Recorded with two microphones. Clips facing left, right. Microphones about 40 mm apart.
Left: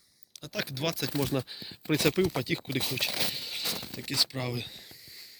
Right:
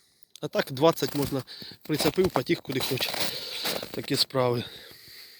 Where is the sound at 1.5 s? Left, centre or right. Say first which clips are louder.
Even; centre.